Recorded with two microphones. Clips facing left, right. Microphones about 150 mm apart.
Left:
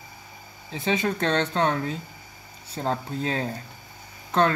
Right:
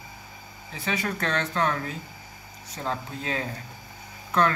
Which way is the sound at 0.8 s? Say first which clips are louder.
Left 5 dB; 30° left (ahead or behind).